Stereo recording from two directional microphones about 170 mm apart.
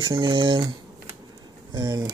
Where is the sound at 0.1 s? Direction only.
30° right (ahead or behind).